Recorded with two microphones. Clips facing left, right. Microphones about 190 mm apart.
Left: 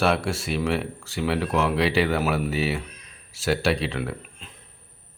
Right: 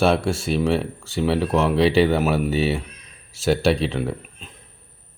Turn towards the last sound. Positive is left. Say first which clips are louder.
# right 4 dB
turn(degrees=-20)  # may be behind; listen again after turning